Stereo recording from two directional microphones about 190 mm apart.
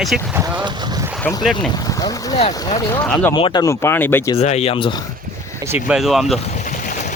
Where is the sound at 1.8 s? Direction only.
20° left (ahead or behind).